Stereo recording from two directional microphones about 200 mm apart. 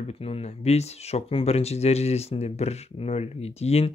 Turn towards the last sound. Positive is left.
turn(degrees=30)  # may be behind; listen again after turning